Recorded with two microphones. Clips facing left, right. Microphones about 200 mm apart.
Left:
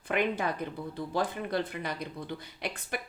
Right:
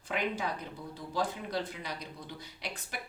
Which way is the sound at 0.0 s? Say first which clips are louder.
Left 5 dB; 55° left (ahead or behind).